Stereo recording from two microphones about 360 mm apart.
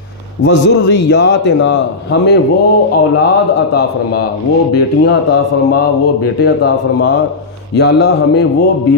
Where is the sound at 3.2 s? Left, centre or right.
Left.